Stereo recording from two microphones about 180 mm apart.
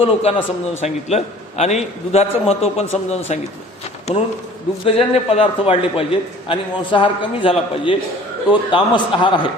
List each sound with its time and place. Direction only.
0.0 s a man's voice: 30° left (ahead or behind)
4.9 s a man's voice: 35° left (ahead or behind)